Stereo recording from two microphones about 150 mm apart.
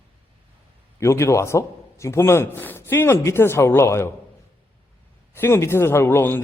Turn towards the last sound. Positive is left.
turn(degrees=15)  # may be behind; listen again after turning